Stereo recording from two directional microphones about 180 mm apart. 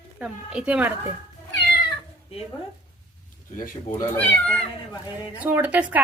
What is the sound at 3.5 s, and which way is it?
Speech, 50° left (ahead or behind).